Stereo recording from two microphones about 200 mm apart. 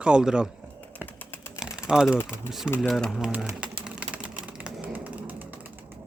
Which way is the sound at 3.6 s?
5° right (ahead or behind).